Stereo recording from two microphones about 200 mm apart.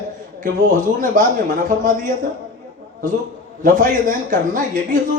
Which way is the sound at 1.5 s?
40° right (ahead or behind).